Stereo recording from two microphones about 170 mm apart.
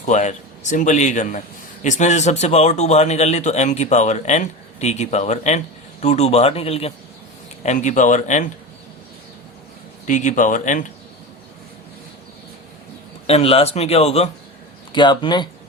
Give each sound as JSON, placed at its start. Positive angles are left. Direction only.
{"t": 0.0, "sound": "a man's voice", "side_deg": 45}
{"t": 10.1, "sound": "speech", "side_deg": 45}
{"t": 13.2, "sound": "a man's voice", "side_deg": 35}
{"t": 14.9, "sound": "speech", "side_deg": 25}